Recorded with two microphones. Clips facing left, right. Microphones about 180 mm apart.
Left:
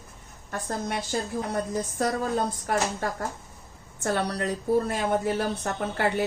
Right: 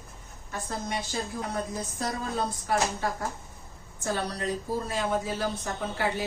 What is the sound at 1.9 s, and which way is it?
Speech, 55° left (ahead or behind).